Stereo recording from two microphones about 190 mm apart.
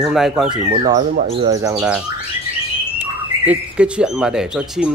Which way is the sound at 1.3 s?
20° right (ahead or behind).